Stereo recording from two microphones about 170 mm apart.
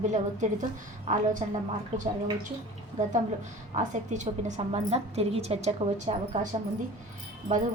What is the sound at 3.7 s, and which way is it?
A woman's voice, 45° right (ahead or behind).